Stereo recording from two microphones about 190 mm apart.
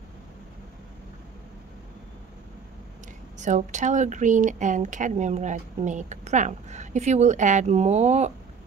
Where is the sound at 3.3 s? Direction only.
40° right (ahead or behind).